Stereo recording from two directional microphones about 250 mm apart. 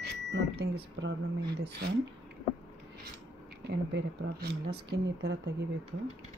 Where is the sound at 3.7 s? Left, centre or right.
Right.